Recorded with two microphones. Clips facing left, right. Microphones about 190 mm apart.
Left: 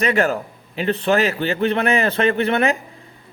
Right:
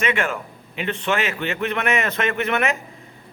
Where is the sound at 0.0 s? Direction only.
35° left (ahead or behind).